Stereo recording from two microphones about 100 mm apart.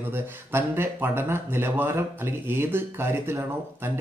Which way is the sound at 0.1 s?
25° right (ahead or behind).